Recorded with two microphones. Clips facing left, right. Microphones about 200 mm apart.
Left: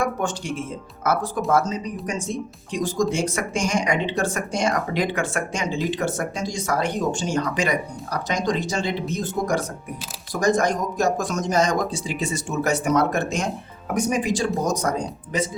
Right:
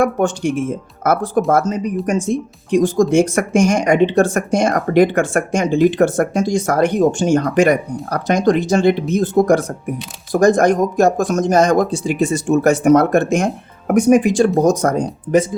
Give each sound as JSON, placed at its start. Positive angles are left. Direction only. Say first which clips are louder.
{"t": 0.0, "sound": "speech", "louder": "right 9 dB", "side_deg": -55}